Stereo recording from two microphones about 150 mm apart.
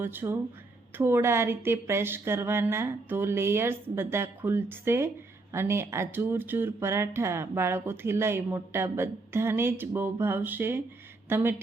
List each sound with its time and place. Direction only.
0.0 s a woman's voice: 15° right (ahead or behind)